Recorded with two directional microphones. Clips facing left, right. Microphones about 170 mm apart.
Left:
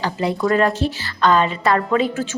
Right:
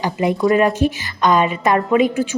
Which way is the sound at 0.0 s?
20° right (ahead or behind).